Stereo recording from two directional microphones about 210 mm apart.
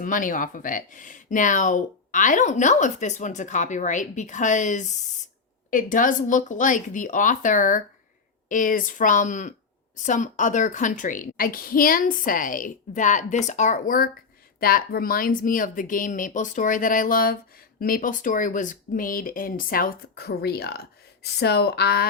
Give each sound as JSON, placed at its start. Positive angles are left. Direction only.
{"t": 0.0, "sound": "a woman's voice", "side_deg": 40}